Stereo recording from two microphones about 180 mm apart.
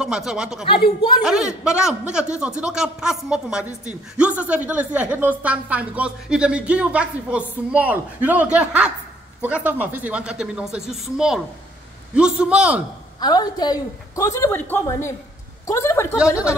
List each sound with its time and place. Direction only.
0.0 s a woman's voice: 5° right (ahead or behind)
13.2 s a woman's voice: 20° left (ahead or behind)